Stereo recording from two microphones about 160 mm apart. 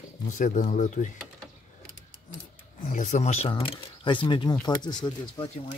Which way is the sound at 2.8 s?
55° left (ahead or behind).